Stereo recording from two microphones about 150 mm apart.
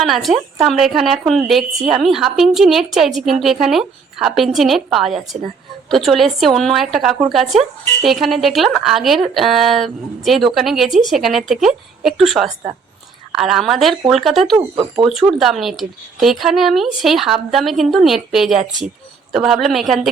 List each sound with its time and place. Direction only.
0.0 s a woman's voice: centre (ahead or behind)